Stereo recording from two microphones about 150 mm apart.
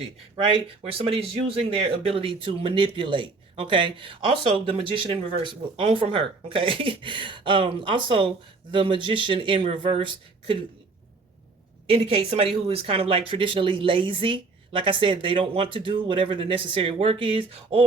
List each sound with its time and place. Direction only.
0.4 s speech: 40° right (ahead or behind)
11.9 s speech: 40° right (ahead or behind)